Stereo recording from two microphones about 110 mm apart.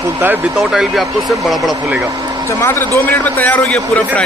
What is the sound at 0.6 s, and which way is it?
Speech, centre (ahead or behind).